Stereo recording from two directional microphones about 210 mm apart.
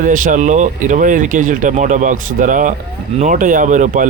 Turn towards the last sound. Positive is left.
turn(degrees=-35)  # may be behind; listen again after turning